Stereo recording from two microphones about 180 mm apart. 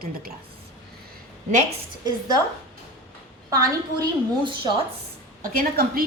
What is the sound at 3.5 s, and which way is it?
A woman's voice, 20° right (ahead or behind).